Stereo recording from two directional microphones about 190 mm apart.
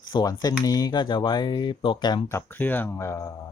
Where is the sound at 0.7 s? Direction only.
20° left (ahead or behind).